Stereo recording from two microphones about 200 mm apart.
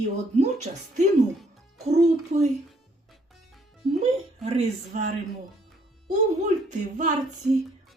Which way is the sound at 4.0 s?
30° right (ahead or behind).